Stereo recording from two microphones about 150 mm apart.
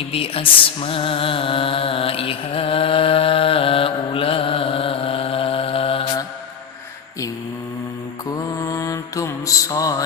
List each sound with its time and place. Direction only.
0.1 s music: 40° left (ahead or behind)
8.5 s mantra: 20° left (ahead or behind)